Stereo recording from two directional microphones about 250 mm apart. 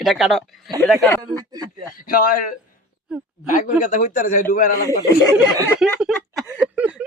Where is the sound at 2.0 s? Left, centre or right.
Left.